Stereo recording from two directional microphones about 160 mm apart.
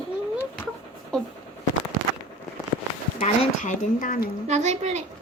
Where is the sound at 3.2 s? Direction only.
50° left (ahead or behind).